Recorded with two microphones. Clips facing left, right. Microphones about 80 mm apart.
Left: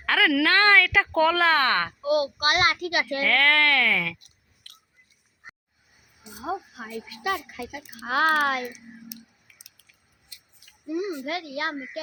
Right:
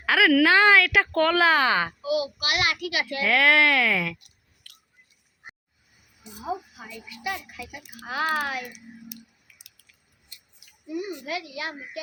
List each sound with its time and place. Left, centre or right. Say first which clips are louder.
0.0 s a woman's voice: right 3 dB; centre
2.0 s a child's voice: left 3 dB; left
3.2 s speech: right 3 dB; centre
4.2 s clicking: even; left
6.5 s a child's voice: left 1 dB; left
10.9 s a child's voice: left 2 dB; left